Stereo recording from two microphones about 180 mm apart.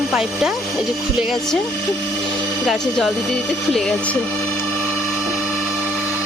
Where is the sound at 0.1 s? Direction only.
Centre (ahead or behind).